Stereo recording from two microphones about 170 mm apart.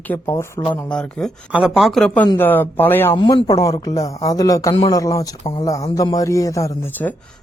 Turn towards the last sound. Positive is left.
turn(degrees=15)  # may be behind; listen again after turning